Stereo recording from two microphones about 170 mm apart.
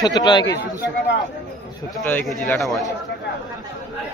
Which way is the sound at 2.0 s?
10° left (ahead or behind).